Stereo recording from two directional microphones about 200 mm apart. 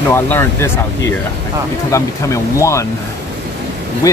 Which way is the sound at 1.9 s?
15° left (ahead or behind).